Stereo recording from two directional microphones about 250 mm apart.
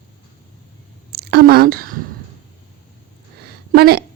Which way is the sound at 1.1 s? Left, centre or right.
Right.